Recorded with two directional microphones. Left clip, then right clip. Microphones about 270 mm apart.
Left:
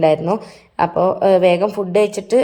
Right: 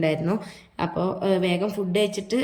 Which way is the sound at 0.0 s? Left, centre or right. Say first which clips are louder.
Left 10 dB; centre.